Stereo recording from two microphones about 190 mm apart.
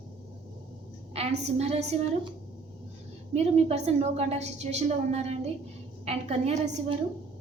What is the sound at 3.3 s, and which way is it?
A woman's voice, 35° right (ahead or behind).